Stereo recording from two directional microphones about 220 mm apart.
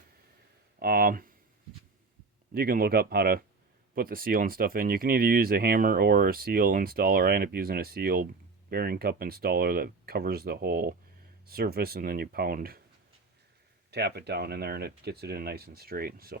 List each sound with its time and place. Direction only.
0.8 s speech: 40° right (ahead or behind)
2.5 s speech: 40° right (ahead or behind)
13.9 s speech: 50° right (ahead or behind)